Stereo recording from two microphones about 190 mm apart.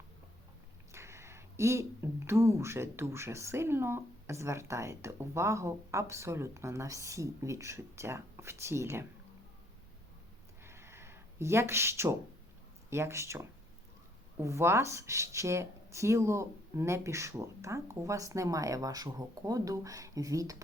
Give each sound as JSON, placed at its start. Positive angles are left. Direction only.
{"t": 0.9, "sound": "speech", "side_deg": -15}
{"t": 10.6, "sound": "a sound", "side_deg": -15}
{"t": 12.9, "sound": "speech", "side_deg": -15}